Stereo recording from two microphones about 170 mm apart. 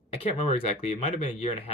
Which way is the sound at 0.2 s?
40° left (ahead or behind).